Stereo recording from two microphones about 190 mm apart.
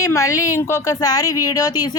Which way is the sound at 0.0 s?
15° left (ahead or behind).